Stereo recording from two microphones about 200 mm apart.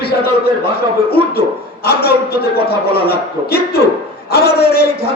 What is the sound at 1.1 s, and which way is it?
A man's voice, 50° left (ahead or behind).